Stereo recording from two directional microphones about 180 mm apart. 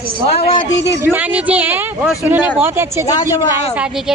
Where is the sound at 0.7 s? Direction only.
80° left.